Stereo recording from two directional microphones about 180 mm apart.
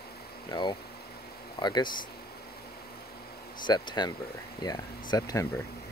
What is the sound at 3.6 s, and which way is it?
Speech, 25° left (ahead or behind).